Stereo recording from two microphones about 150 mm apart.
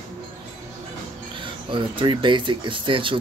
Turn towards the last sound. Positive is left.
turn(degrees=-35)  # may be behind; listen again after turning